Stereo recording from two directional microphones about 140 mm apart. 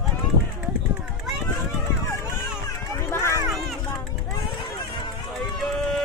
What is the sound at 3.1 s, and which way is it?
Run, 20° left (ahead or behind).